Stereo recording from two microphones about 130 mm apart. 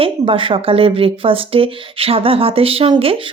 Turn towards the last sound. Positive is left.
turn(degrees=-45)  # may be behind; listen again after turning